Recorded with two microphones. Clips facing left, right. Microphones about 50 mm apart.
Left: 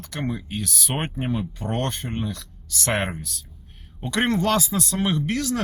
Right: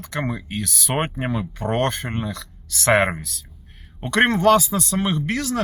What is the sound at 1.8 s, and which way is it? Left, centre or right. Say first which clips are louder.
Speech: right 4 dB; right.